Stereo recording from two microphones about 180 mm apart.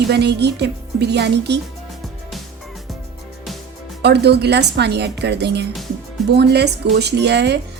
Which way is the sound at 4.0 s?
65° right (ahead or behind).